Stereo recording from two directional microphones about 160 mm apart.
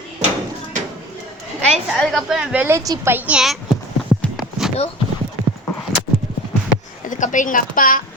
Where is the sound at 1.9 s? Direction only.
Centre (ahead or behind).